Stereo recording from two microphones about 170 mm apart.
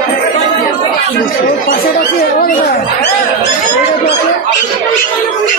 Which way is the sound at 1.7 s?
60° left (ahead or behind).